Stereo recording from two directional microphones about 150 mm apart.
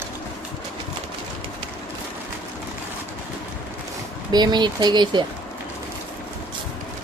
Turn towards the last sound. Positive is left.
turn(degrees=-30)  # may be behind; listen again after turning